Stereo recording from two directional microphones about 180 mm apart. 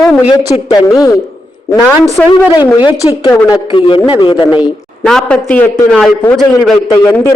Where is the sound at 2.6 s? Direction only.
20° left (ahead or behind).